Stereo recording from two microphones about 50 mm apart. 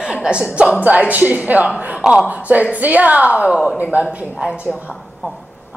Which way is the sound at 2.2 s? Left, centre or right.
Right.